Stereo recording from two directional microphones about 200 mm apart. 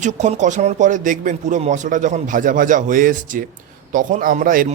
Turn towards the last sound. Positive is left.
turn(degrees=-45)  # may be behind; listen again after turning